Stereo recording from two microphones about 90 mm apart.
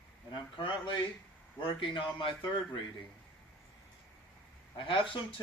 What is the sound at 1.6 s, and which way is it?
Speech, 70° left (ahead or behind).